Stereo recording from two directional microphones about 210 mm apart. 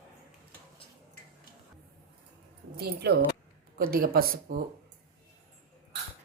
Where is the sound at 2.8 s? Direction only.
50° right (ahead or behind).